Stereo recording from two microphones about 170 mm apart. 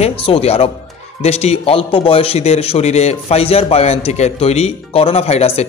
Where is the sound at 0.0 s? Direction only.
35° left (ahead or behind).